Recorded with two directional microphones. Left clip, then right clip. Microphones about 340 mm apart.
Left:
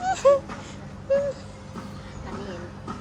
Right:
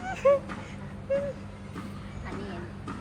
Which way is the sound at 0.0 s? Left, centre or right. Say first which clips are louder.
Left 5 dB; centre.